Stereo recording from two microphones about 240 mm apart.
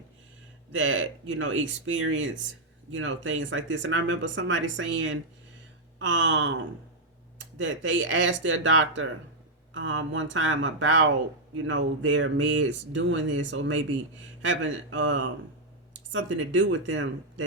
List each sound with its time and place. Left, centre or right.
0.7 s speech: right